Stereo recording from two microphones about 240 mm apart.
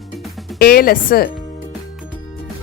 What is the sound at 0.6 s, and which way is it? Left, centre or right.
Speech, left.